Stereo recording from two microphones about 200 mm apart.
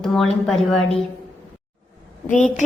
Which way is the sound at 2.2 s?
40° left (ahead or behind).